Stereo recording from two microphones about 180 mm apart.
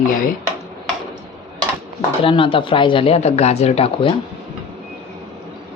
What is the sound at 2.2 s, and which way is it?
Speech, 30° left (ahead or behind).